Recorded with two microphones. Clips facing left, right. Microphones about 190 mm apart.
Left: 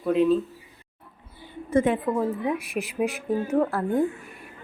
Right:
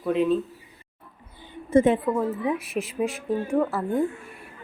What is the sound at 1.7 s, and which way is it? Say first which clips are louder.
Speech: right 3 dB; 25° right (ahead or behind).